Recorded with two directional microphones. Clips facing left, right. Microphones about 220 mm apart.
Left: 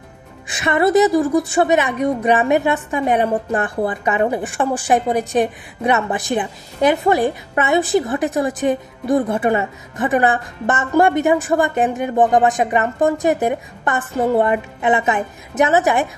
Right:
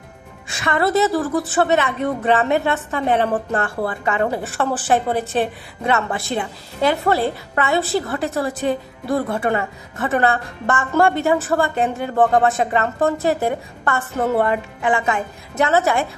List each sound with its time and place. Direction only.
0.5 s a woman's voice: 20° left (ahead or behind)